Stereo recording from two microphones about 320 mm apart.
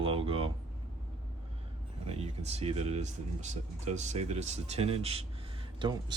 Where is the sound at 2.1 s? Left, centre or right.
Centre.